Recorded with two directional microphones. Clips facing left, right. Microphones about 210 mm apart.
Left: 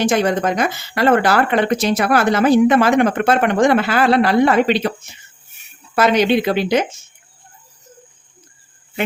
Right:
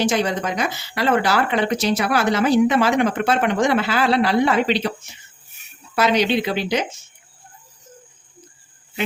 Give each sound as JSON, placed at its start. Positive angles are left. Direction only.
{"t": 0.0, "sound": "speech", "side_deg": 50}